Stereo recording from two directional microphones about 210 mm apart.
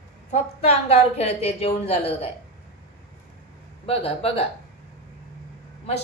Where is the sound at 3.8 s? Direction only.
25° left (ahead or behind).